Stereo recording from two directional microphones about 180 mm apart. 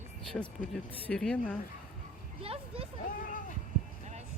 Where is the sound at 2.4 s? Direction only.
30° right (ahead or behind).